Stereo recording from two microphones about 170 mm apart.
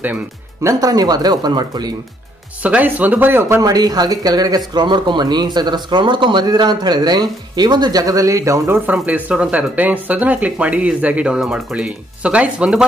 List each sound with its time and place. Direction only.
0.7 s speech: 20° right (ahead or behind)
2.6 s speech: 10° right (ahead or behind)